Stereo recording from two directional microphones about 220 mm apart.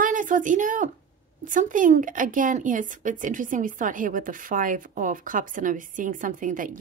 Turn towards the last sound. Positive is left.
turn(degrees=-35)  # may be behind; listen again after turning